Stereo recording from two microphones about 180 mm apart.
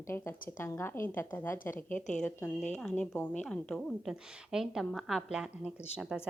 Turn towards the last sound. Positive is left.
turn(degrees=0)  # may be behind; listen again after turning